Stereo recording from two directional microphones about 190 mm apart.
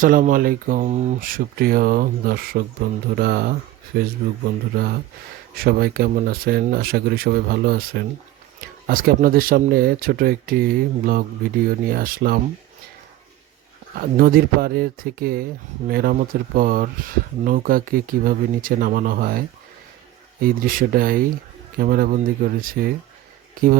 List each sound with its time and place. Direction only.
0.0 s speech: 45° right (ahead or behind)
5.5 s speech: 55° right (ahead or behind)
14.0 s speech: 50° right (ahead or behind)
20.4 s speech: 50° right (ahead or behind)